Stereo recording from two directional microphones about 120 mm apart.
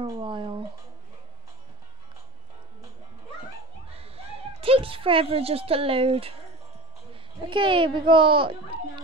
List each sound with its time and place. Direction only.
0.1 s speech: 45° right (ahead or behind)
3.9 s a sound: 55° right (ahead or behind)
7.3 s a child's voice: 40° right (ahead or behind)